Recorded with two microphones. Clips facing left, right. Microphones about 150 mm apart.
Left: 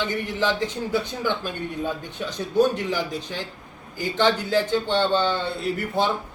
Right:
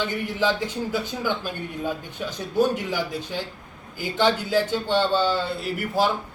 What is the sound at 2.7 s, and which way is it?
Speech, 10° right (ahead or behind).